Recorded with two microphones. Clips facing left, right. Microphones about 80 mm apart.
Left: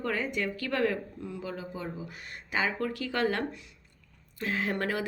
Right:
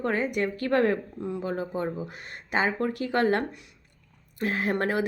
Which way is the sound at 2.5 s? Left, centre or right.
Right.